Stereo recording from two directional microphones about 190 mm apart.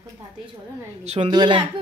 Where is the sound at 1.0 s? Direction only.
35° right (ahead or behind).